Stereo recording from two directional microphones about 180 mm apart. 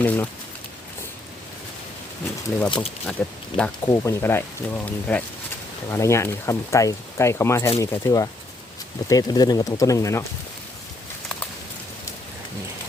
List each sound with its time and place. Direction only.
0.0 s speech: 10° left (ahead or behind)
2.6 s speech: 30° left (ahead or behind)
3.1 s speech: 5° left (ahead or behind)
3.8 s speech: 20° left (ahead or behind)